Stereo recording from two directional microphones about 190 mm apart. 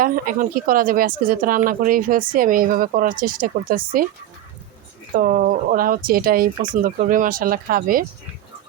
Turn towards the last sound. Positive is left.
turn(degrees=-50)  # may be behind; listen again after turning